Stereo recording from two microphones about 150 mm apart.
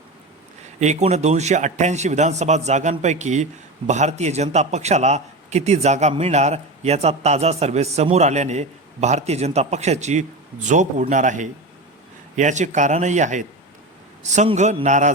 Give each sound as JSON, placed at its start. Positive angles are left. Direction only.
{"t": 0.8, "sound": "a man's voice", "side_deg": -50}